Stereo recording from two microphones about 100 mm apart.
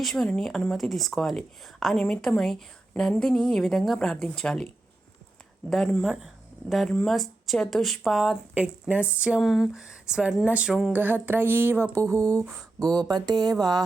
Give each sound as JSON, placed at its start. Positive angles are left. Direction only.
{"t": 0.0, "sound": "speech", "side_deg": 5}
{"t": 5.7, "sound": "speech", "side_deg": 5}
{"t": 8.5, "sound": "speech", "side_deg": -15}
{"t": 9.4, "sound": "speech", "side_deg": 0}
{"t": 12.8, "sound": "speech", "side_deg": -40}